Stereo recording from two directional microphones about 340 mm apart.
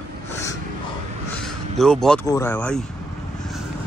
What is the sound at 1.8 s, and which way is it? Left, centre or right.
A man's voice, centre.